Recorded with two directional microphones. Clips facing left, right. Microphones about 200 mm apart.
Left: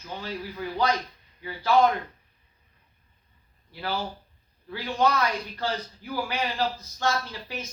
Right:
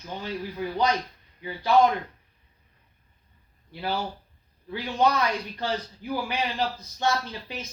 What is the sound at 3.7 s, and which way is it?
A man's voice, 20° right (ahead or behind).